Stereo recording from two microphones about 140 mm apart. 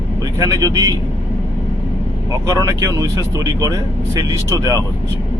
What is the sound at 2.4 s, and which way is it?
Speech, 25° right (ahead or behind).